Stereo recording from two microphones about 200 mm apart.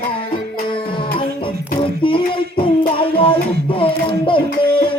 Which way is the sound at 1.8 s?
25° left (ahead or behind).